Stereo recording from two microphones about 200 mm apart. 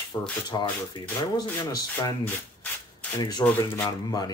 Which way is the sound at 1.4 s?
20° left (ahead or behind).